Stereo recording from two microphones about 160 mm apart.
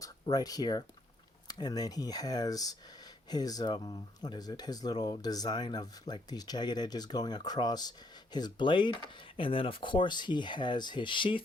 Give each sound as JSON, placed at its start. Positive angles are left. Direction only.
{"t": 0.0, "sound": "speech", "side_deg": 25}